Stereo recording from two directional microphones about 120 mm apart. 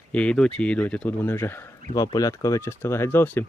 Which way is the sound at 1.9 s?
30° left (ahead or behind).